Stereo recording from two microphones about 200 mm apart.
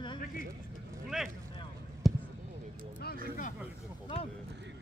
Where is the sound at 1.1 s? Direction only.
5° right (ahead or behind).